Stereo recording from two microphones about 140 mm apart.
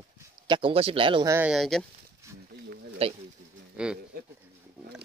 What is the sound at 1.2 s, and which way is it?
Speech, 20° right (ahead or behind).